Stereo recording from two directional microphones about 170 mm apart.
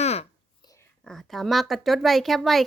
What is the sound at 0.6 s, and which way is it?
Whispering, 20° left (ahead or behind).